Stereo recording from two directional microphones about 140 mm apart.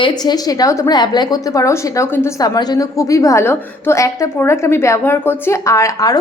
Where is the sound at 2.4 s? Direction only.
30° left (ahead or behind).